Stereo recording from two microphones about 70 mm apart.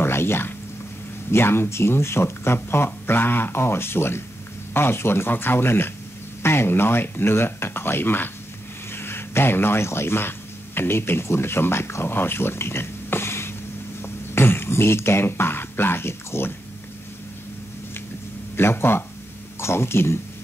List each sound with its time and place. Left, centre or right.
0.0 s a sound: left
1.3 s speech: left
18.6 s speech: left